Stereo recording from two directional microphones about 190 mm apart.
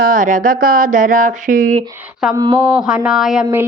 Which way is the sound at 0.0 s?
45° right (ahead or behind).